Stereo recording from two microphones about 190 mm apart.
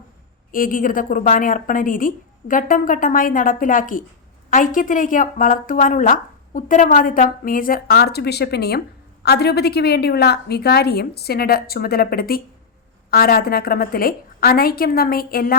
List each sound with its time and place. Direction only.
0.5 s a woman's voice: 45° left (ahead or behind)